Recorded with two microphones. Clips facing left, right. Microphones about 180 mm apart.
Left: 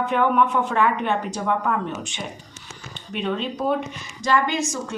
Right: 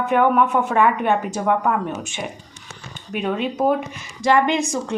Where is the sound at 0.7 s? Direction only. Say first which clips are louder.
Right 5 dB; 55° right (ahead or behind).